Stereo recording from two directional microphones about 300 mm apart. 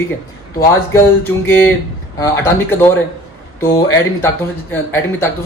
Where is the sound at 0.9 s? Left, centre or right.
Centre.